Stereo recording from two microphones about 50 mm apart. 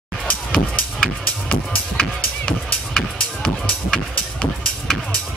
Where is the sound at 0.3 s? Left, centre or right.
Left.